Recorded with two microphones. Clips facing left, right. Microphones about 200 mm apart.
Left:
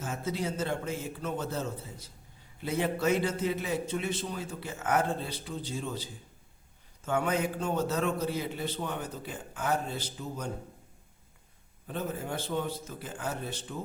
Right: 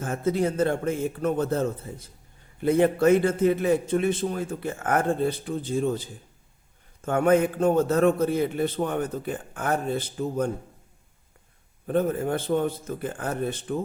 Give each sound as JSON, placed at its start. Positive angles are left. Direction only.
{"t": 0.0, "sound": "a man's voice", "side_deg": -55}
{"t": 11.9, "sound": "a man's voice", "side_deg": -55}